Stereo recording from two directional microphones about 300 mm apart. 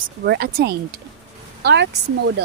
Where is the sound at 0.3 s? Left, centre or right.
Right.